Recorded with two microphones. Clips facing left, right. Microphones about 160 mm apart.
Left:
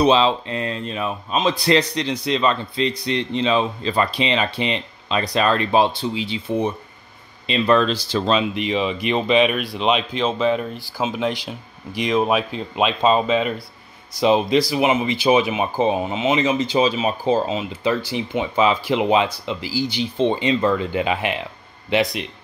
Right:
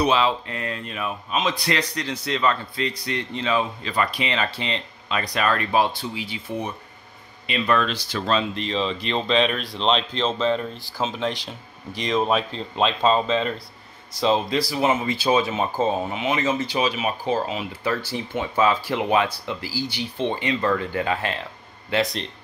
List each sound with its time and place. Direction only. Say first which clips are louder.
0.0 s speech: left 4 dB; 25° left (ahead or behind)
8.3 s speech: left 3 dB; 15° left (ahead or behind)